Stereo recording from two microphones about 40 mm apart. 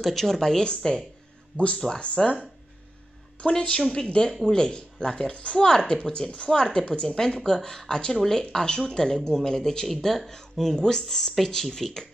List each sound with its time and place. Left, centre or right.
0.0 s speech: centre
1.5 s speech: left
3.5 s speech: left